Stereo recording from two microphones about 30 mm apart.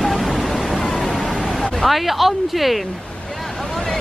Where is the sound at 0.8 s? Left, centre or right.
Centre.